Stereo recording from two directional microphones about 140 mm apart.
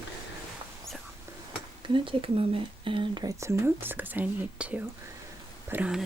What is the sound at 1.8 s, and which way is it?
Speech, 35° right (ahead or behind).